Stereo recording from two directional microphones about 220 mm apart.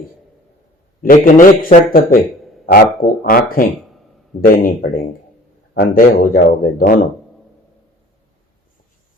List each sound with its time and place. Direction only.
1.0 s speech: 40° left (ahead or behind)